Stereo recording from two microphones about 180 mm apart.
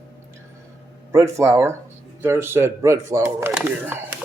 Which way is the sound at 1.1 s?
15° right (ahead or behind).